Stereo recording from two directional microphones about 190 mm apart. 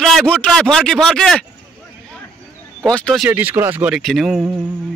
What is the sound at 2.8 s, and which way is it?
Speech, centre (ahead or behind).